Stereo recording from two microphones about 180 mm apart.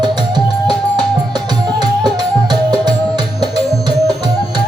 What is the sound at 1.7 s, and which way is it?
Music, 25° right (ahead or behind).